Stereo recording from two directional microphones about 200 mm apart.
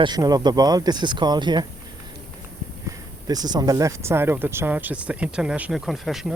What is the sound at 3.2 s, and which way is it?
Speech, 20° right (ahead or behind).